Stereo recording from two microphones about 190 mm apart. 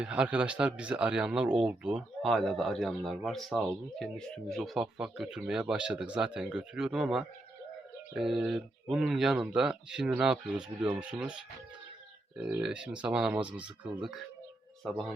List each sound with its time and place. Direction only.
0.0 s speech: 5° right (ahead or behind)
12.4 s speech: 10° right (ahead or behind)